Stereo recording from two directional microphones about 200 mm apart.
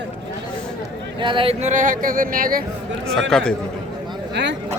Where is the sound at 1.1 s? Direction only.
25° right (ahead or behind); by 2.6 s 45° right (ahead or behind).